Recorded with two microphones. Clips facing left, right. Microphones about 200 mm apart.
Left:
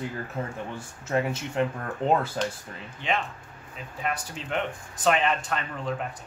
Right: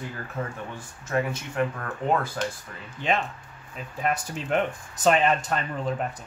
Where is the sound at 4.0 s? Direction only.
45° right (ahead or behind).